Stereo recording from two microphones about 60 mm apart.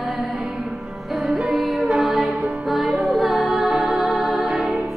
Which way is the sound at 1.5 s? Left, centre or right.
Centre.